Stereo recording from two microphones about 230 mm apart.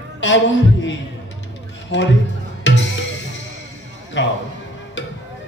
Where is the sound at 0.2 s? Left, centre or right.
Left.